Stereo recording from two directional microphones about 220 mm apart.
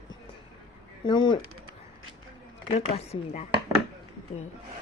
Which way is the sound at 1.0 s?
20° left (ahead or behind).